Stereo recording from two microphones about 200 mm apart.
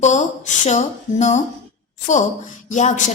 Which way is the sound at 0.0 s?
35° left (ahead or behind).